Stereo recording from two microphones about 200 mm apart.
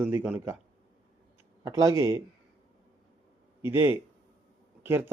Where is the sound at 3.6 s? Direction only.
10° right (ahead or behind).